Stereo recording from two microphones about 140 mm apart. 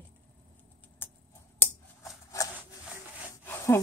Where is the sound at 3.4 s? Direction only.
15° left (ahead or behind).